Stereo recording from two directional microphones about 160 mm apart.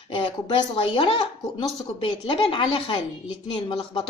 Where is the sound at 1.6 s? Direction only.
30° left (ahead or behind).